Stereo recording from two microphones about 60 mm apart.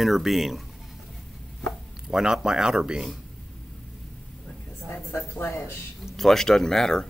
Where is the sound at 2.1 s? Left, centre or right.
Centre.